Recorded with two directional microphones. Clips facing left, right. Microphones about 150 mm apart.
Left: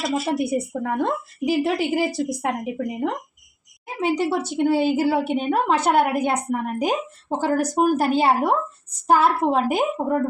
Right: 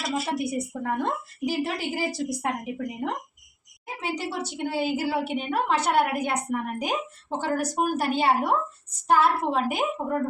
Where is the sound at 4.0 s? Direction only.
55° left (ahead or behind).